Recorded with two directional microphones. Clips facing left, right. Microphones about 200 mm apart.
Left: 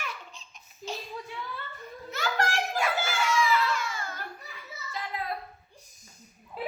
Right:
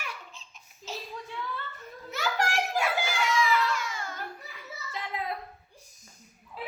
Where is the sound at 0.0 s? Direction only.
10° right (ahead or behind).